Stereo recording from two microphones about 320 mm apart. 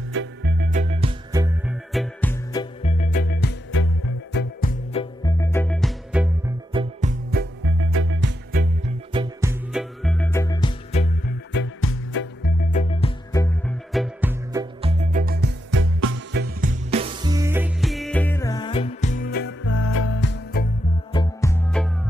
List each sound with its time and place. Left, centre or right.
0.1 s music: right; by 5.0 s left
5.2 s music: centre
6.7 s music: centre
9.1 s music: centre
11.5 s music: left; by 16.4 s right
16.6 s music: centre; by 20.6 s left
21.1 s music: centre